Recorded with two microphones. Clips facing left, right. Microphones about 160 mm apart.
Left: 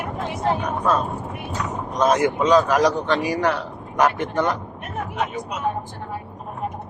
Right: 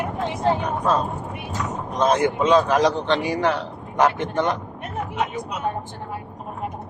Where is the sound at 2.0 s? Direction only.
30° right (ahead or behind).